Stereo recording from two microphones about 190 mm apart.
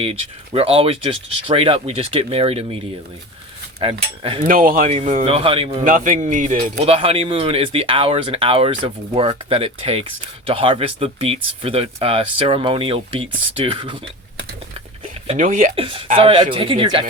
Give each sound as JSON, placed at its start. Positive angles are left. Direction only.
{"t": 0.0, "sound": "speech", "side_deg": -30}
{"t": 3.8, "sound": "speech", "side_deg": -30}
{"t": 4.4, "sound": "speech", "side_deg": -50}
{"t": 4.9, "sound": "speech", "side_deg": -35}
{"t": 5.8, "sound": "speech", "side_deg": -45}
{"t": 15.3, "sound": "speech", "side_deg": -40}
{"t": 15.7, "sound": "speech", "side_deg": -30}